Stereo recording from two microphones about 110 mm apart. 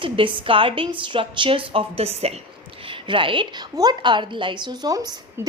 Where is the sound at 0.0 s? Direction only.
50° right (ahead or behind).